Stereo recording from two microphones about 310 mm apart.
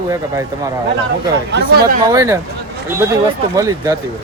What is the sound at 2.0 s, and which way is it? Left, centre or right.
Speech, centre.